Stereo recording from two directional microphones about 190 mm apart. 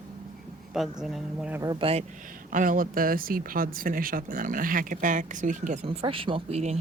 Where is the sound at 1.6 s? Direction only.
25° right (ahead or behind).